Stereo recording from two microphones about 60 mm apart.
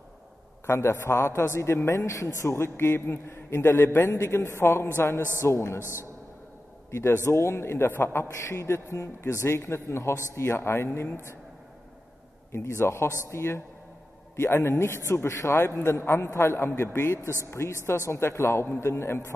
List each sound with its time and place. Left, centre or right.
0.7 s a man's voice: left
5.8 s a man's voice: right
6.9 s a man's voice: left
12.5 s a man's voice: left